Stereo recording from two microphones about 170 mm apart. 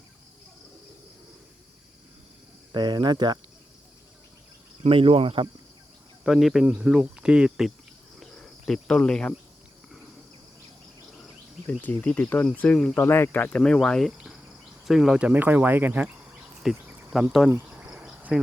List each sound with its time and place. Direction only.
2.7 s speech: 25° right (ahead or behind)
4.8 s speech: 35° right (ahead or behind)
6.2 s speech: centre (ahead or behind)
8.2 s cricket: 5° left (ahead or behind)
11.6 s speech: 10° left (ahead or behind)
17.5 s cricket: 5° right (ahead or behind)